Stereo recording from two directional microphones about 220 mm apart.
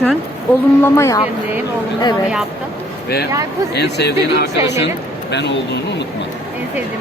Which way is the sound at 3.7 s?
50° left (ahead or behind).